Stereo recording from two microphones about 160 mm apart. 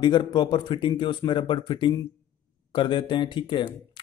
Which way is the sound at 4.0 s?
30° left (ahead or behind).